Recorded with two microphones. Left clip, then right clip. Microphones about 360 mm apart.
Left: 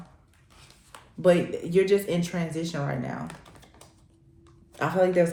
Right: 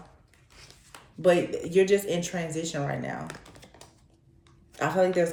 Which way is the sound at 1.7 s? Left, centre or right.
Centre.